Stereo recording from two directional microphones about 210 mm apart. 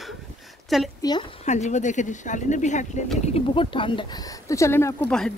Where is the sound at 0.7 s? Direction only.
Centre (ahead or behind).